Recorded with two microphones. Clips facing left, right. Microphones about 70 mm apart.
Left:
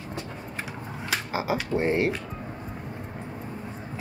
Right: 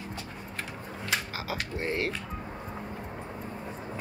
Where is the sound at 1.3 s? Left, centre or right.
Centre.